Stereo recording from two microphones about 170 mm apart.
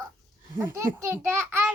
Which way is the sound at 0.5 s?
15° right (ahead or behind).